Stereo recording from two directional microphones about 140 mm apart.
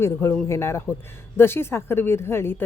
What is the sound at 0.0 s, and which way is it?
A woman's voice, 20° left (ahead or behind).